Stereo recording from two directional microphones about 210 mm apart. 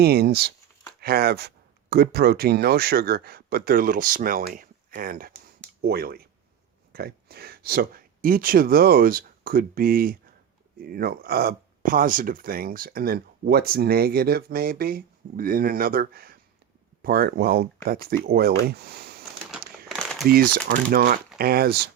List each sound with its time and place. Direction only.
0.0 s speech: 50° right (ahead or behind)
19.5 s a sound: centre (ahead or behind)
20.2 s speech: 45° right (ahead or behind)